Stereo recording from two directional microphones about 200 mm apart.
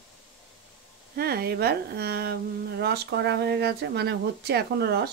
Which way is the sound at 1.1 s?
50° right (ahead or behind).